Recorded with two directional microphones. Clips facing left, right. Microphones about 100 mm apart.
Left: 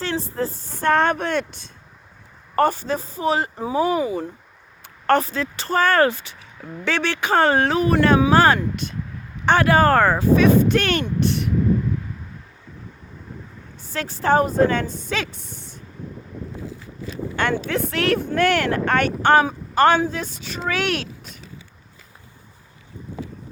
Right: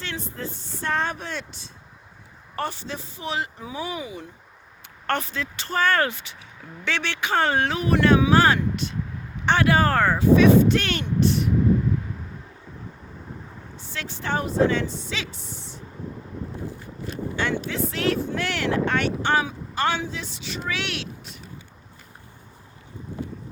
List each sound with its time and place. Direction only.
0.0 s speech: 35° left (ahead or behind); by 11.5 s 60° left (ahead or behind)
13.9 s speech: 40° left (ahead or behind)
17.3 s speech: 55° left (ahead or behind)